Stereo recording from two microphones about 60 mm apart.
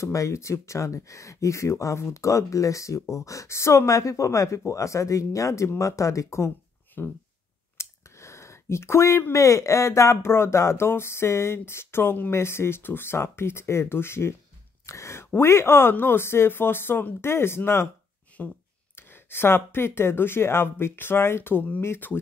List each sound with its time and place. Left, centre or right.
0.0 s speech: left
7.0 s speech: left
7.7 s a sound: left
9.3 s speech: left
10.2 s speech: left
18.4 s speech: left
18.9 s speech: left